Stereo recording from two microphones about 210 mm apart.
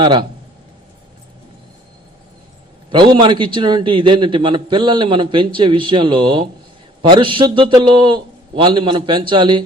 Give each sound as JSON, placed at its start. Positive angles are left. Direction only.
{"t": 0.0, "sound": "a man's voice", "side_deg": -20}
{"t": 2.9, "sound": "a man's voice", "side_deg": -20}